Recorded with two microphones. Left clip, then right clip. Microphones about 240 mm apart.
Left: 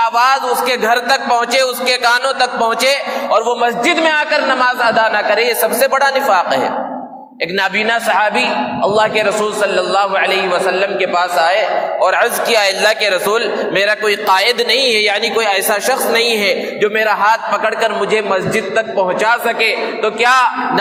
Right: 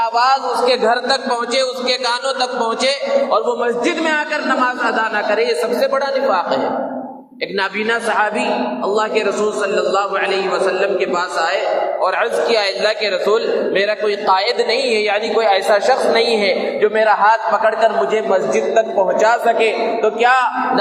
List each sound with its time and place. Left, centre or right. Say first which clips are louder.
0.0 s a man's voice: left 2 dB; left
7.9 s a man's voice: left 1 dB; left